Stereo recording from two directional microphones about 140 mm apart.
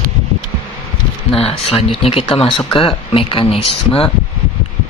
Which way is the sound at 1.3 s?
45° left (ahead or behind).